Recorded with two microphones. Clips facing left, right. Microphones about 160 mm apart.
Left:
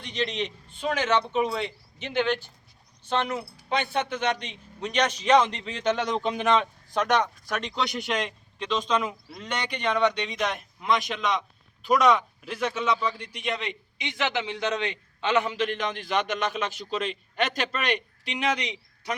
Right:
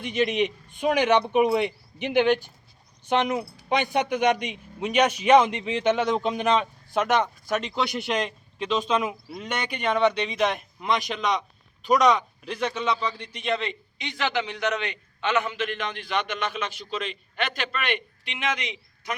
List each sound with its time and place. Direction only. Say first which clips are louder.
0.0 s a man's voice: right 6 dB; 10° right (ahead or behind); by 19.1 s 35° left (ahead or behind)